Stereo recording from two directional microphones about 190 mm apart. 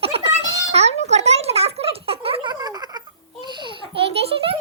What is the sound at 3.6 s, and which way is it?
Baby laughter, 30° right (ahead or behind).